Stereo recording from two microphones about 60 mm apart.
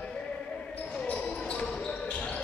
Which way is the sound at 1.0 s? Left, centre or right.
Centre.